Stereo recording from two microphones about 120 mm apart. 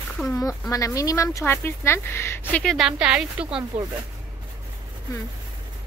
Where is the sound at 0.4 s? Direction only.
25° left (ahead or behind).